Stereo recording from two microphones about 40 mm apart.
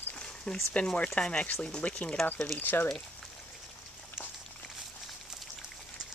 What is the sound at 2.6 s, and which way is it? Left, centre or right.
Speech, left.